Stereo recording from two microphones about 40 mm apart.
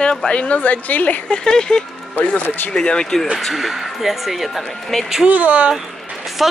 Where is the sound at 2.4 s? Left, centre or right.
Left.